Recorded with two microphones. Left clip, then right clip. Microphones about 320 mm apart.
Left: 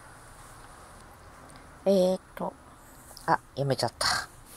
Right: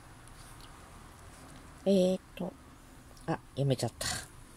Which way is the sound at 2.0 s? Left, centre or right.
Left.